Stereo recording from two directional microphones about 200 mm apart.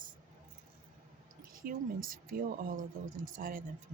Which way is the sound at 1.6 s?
45° right (ahead or behind).